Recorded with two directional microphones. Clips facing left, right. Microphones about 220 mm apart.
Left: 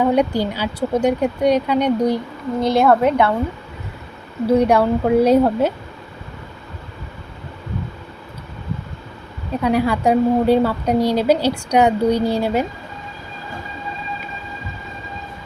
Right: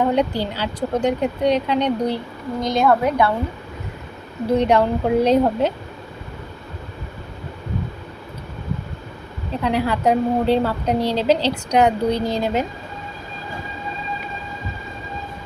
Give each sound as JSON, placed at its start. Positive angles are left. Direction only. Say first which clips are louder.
{"t": 0.0, "sound": "a woman's voice", "louder": "left 3 dB", "side_deg": 10}
{"t": 2.6, "sound": "a woman's voice", "louder": "left 3 dB", "side_deg": 25}
{"t": 4.4, "sound": "a woman's voice", "louder": "left 2 dB", "side_deg": 10}
{"t": 9.6, "sound": "a woman's voice", "louder": "left 2 dB", "side_deg": 10}